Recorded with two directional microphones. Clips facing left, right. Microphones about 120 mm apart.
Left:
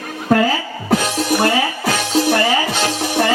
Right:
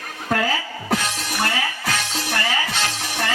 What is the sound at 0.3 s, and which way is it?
Music, 25° left (ahead or behind).